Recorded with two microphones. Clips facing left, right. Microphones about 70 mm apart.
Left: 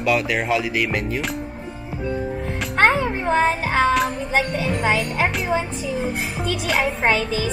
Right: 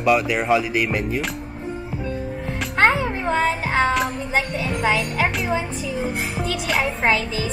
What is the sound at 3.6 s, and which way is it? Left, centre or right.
Child singing, centre.